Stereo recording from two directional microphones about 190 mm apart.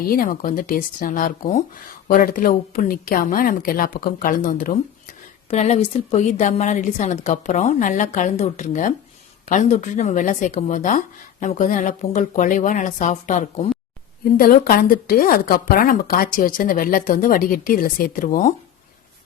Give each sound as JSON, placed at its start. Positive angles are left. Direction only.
{"t": 0.1, "sound": "speech", "side_deg": 45}
{"t": 5.5, "sound": "speech", "side_deg": 35}
{"t": 14.3, "sound": "speech", "side_deg": 50}